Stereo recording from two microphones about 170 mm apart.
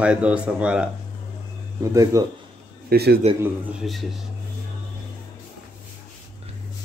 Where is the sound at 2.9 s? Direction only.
70° right (ahead or behind).